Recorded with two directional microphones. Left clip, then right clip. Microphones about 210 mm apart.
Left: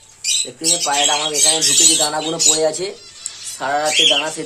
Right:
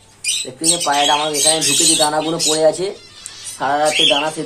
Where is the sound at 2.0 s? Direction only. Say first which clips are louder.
Right 2 dB; 10° left (ahead or behind).